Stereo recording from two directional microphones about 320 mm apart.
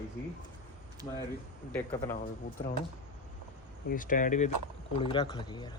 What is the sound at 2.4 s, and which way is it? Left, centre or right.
Speech, left.